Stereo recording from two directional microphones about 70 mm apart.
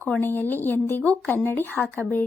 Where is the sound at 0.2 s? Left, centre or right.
Left.